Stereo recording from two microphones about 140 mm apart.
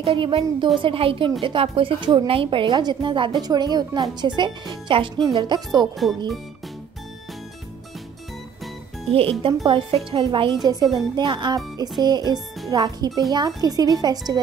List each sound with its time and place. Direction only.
0.0 s a woman's voice: 40° right (ahead or behind)
5.9 s speech: centre (ahead or behind)
9.1 s a woman's voice: 45° right (ahead or behind)